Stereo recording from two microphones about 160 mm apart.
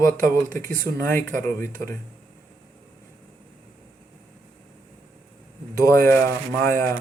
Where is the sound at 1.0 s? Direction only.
15° left (ahead or behind).